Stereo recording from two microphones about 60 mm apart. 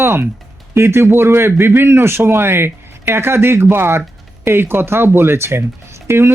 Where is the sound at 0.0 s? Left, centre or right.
Right.